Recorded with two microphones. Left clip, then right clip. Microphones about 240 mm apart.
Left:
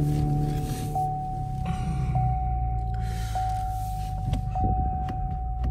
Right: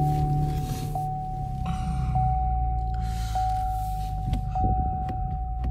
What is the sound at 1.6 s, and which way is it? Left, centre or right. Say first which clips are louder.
Vehicle: right 1 dB; centre.